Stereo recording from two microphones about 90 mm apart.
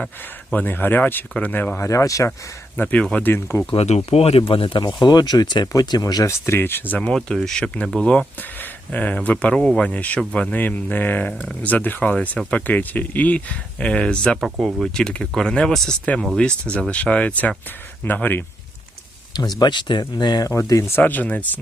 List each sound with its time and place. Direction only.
0.5 s speech: 20° left (ahead or behind)
1.8 s speech: 35° left (ahead or behind)
2.7 s speech: 15° left (ahead or behind)
3.2 s speech: 25° left (ahead or behind)
4.3 s speech: 90° left
4.8 s speech: 55° left (ahead or behind)
6.2 s speech: 25° left (ahead or behind)
7.0 s speech: 10° left (ahead or behind)
9.9 s speech: 15° left (ahead or behind)
14.4 s speech: 5° right (ahead or behind); by 18.4 s 20° left (ahead or behind)
19.5 s speech: 55° left (ahead or behind)
20.5 s speech: 35° left (ahead or behind)
20.9 s speech: 20° left (ahead or behind)